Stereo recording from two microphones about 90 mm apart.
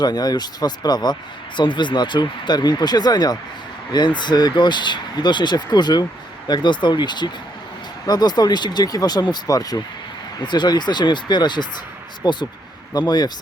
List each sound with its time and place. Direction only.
0.0 s speech: 45° left (ahead or behind)
10.4 s speech: 55° left (ahead or behind)